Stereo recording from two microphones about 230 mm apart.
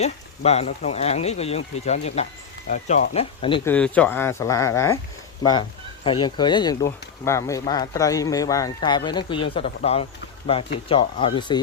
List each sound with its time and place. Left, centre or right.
0.0 s speech: left
3.7 s speech: centre
6.1 s speech: left